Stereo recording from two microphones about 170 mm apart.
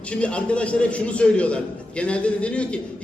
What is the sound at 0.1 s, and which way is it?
A man's voice, 5° left (ahead or behind).